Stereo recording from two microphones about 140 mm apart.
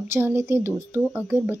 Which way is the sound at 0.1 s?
15° right (ahead or behind).